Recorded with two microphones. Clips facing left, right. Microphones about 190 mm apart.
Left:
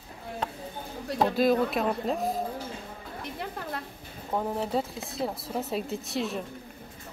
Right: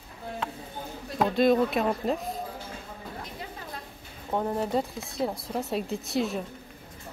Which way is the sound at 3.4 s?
60° left (ahead or behind).